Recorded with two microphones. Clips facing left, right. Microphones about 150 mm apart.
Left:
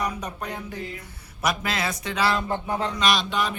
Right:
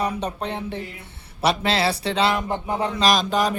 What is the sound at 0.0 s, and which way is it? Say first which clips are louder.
A man's voice: right 4 dB; 30° right (ahead or behind).